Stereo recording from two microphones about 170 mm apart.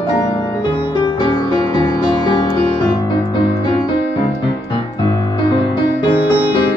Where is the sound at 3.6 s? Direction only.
30° left (ahead or behind).